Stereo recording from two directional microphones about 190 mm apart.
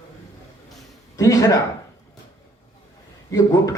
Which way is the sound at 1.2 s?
15° left (ahead or behind).